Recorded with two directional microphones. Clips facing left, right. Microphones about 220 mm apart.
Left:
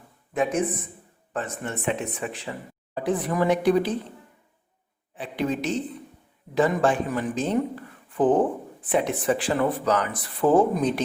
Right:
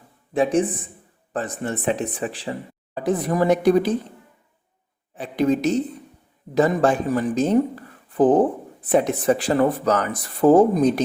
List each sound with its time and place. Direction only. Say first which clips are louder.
0.3 s a woman's voice: right 5 dB; 30° right (ahead or behind)
5.1 s speech: right 7 dB; 40° right (ahead or behind)